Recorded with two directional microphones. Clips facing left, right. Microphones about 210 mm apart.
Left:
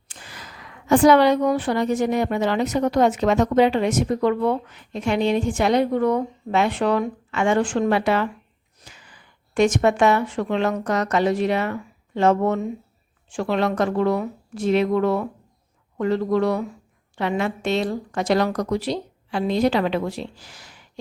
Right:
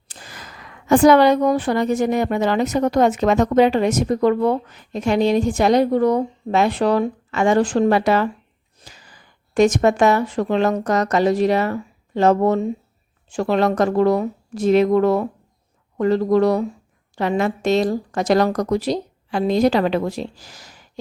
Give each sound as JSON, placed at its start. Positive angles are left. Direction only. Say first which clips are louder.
{"t": 0.1, "sound": "a woman's voice", "louder": "right 2 dB", "side_deg": -40}